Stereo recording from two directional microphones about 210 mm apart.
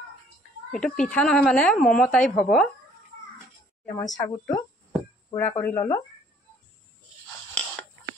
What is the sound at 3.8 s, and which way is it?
Speech, 15° left (ahead or behind).